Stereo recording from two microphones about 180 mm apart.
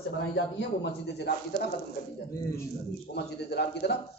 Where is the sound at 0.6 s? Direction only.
70° left (ahead or behind).